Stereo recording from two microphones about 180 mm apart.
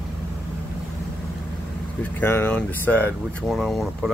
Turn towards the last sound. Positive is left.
turn(degrees=0)  # may be behind; listen again after turning